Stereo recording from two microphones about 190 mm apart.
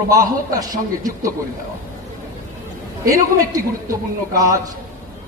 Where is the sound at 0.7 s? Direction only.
45° right (ahead or behind).